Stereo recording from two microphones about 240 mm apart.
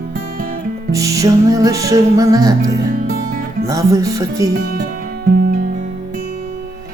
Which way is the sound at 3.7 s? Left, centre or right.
Centre.